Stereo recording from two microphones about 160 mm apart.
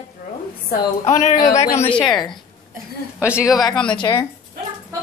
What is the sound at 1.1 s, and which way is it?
Speech, 50° left (ahead or behind).